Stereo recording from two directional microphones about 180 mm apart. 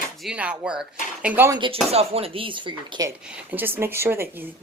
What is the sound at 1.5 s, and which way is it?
Speech, 30° right (ahead or behind).